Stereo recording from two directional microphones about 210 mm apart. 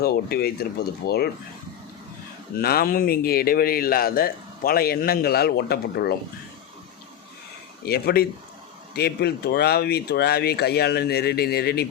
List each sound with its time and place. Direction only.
0.0 s a man's voice: 50° left (ahead or behind)
2.6 s a man's voice: 45° left (ahead or behind)
7.9 s a man's voice: 50° left (ahead or behind)